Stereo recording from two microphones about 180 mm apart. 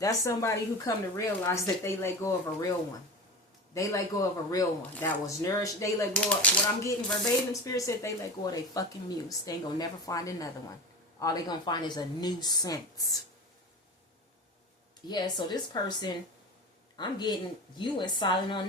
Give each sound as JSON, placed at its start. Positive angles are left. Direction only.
{"t": 0.0, "sound": "speech", "side_deg": 15}
{"t": 3.8, "sound": "speech", "side_deg": 20}
{"t": 7.6, "sound": "speech", "side_deg": 15}
{"t": 15.0, "sound": "speech", "side_deg": 25}